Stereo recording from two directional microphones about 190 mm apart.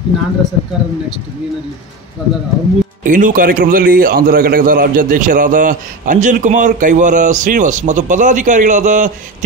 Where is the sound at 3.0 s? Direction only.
45° right (ahead or behind).